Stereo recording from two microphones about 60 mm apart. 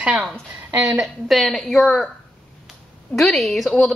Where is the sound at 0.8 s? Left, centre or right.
Centre.